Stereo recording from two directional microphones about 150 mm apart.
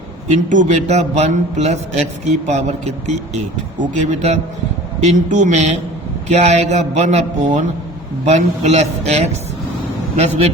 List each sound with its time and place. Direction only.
0.3 s a man's voice: 50° right (ahead or behind)